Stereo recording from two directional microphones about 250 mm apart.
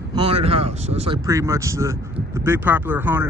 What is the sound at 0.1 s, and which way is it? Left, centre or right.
Speech, right.